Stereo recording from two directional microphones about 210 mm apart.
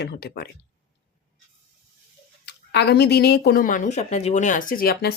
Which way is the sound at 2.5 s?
55° left (ahead or behind).